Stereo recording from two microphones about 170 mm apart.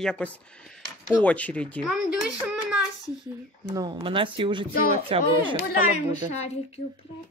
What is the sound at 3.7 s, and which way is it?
A woman's voice, 25° right (ahead or behind).